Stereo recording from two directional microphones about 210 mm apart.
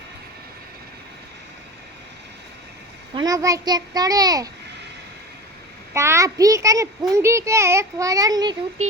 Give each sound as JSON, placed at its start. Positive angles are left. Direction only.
{"t": 3.2, "sound": "a child's voice", "side_deg": -15}
{"t": 5.9, "sound": "a child's voice", "side_deg": -15}